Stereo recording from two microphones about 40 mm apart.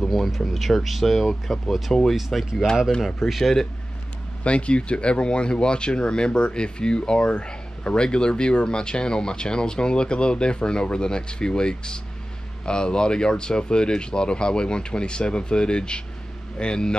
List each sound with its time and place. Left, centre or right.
0.0 s a sound: centre
0.5 s speech: centre
2.1 s speech: centre
4.5 s speech: left